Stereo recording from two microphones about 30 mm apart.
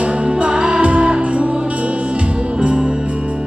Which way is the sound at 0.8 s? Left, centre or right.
Right.